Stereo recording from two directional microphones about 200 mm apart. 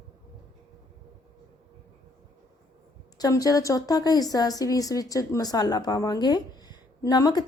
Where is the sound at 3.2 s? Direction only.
15° left (ahead or behind).